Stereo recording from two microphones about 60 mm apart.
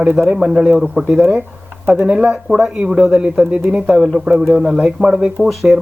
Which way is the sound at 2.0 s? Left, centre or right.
Centre.